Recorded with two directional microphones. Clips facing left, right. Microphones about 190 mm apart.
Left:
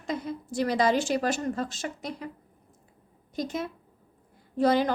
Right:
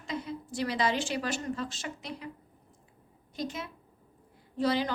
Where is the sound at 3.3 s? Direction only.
45° left (ahead or behind).